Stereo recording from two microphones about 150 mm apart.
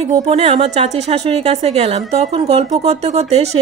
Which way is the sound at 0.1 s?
45° right (ahead or behind).